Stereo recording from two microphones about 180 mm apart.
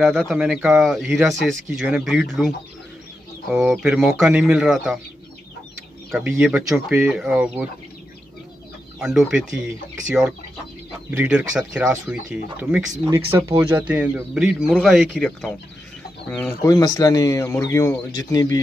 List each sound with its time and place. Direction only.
0.0 s speech: centre (ahead or behind)
3.5 s speech: centre (ahead or behind)
6.1 s speech: 5° right (ahead or behind)
9.0 s speech: centre (ahead or behind)
11.1 s speech: 5° right (ahead or behind)
16.6 s speech: 20° left (ahead or behind)